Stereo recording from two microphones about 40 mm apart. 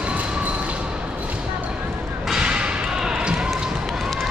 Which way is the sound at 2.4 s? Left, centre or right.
Right.